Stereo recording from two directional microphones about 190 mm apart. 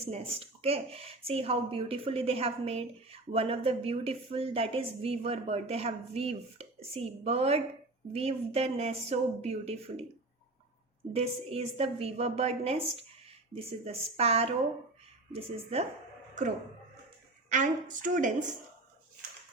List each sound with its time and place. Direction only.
0.0 s a woman's voice: 30° right (ahead or behind)
11.1 s a woman's voice: 30° right (ahead or behind)
17.5 s a woman's voice: 40° right (ahead or behind)